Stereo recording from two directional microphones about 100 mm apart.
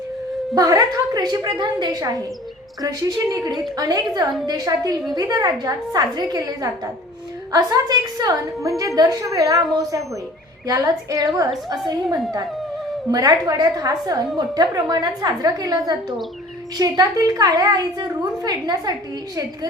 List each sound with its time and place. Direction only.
0.5 s a woman's voice: 35° right (ahead or behind)
13.1 s a woman's voice: 40° right (ahead or behind)